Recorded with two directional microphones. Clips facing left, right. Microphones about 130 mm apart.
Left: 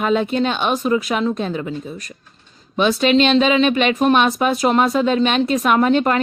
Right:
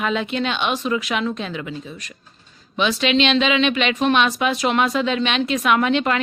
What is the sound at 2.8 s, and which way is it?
Speech, 45° left (ahead or behind).